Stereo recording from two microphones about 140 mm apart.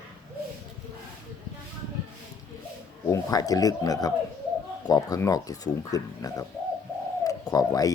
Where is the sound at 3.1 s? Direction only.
25° left (ahead or behind).